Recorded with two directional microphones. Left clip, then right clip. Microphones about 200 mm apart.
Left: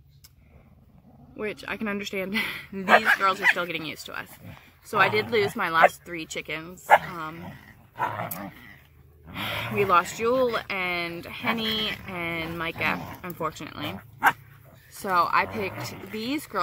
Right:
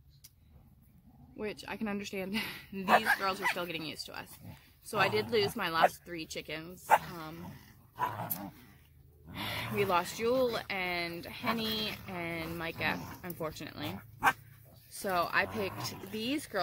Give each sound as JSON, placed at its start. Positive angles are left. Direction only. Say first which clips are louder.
{"t": 1.3, "sound": "speech", "louder": "left 8 dB", "side_deg": -5}
{"t": 7.3, "sound": "dog", "louder": "left 7 dB", "side_deg": 30}
{"t": 9.4, "sound": "speech", "louder": "left 7 dB", "side_deg": 0}
{"t": 11.4, "sound": "speech", "louder": "left 7 dB", "side_deg": 30}
{"t": 11.7, "sound": "speech", "louder": "left 8 dB", "side_deg": 0}
{"t": 15.0, "sound": "speech", "louder": "left 8 dB", "side_deg": 0}